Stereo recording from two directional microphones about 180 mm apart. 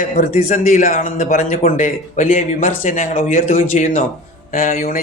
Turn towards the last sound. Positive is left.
turn(degrees=50)  # may be behind; listen again after turning